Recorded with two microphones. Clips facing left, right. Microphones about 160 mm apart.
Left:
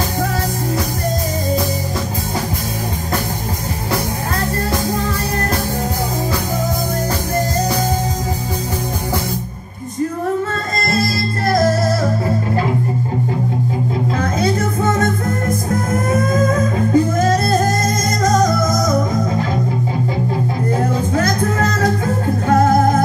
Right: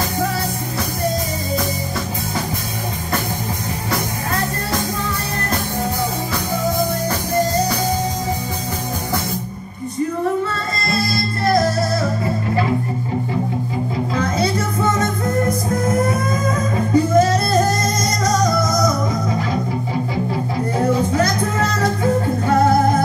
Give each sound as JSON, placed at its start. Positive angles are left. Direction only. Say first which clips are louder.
{"t": 10.5, "sound": "music", "louder": "left 3 dB", "side_deg": 45}
{"t": 16.9, "sound": "music", "louder": "right 2 dB", "side_deg": 50}
{"t": 22.5, "sound": "music", "louder": "left 2 dB", "side_deg": 45}